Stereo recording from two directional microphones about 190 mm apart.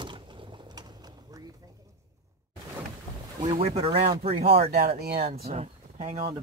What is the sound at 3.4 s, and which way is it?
Speech, 30° right (ahead or behind).